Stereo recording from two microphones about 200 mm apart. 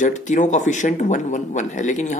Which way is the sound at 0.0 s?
40° left (ahead or behind).